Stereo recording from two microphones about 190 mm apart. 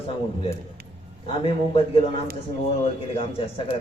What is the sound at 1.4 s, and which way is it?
A man's voice, 30° left (ahead or behind).